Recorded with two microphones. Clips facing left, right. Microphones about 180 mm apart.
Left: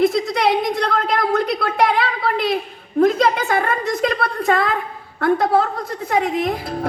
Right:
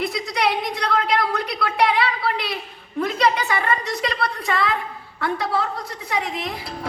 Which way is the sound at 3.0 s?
50° left (ahead or behind).